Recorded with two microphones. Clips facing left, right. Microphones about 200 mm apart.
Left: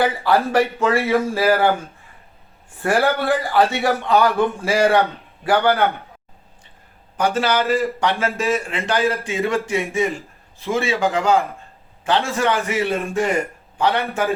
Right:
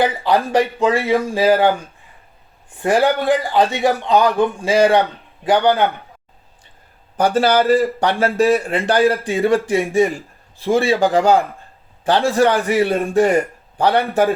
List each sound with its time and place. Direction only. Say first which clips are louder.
0.0 s speech: right 1 dB; 15° right (ahead or behind)
2.7 s speech: right 3 dB; 15° right (ahead or behind)
7.2 s a man's voice: right 4 dB; 35° right (ahead or behind)